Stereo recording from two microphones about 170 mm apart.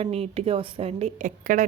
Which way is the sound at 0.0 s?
35° right (ahead or behind).